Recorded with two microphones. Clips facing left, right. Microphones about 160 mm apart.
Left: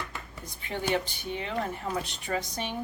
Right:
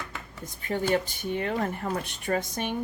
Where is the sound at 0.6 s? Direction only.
45° right (ahead or behind).